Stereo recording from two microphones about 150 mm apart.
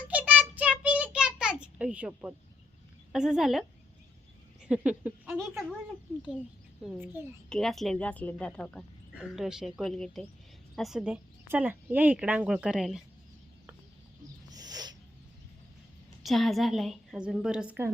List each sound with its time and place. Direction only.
0.1 s child singing: 10° right (ahead or behind)
0.8 s a sound: 10° right (ahead or behind)
3.1 s a woman's voice: 5° right (ahead or behind)
7.2 s a woman's voice: 15° right (ahead or behind)
7.5 s a woman's voice: centre (ahead or behind)
14.5 s a sound: 25° right (ahead or behind)
16.2 s a woman's voice: centre (ahead or behind)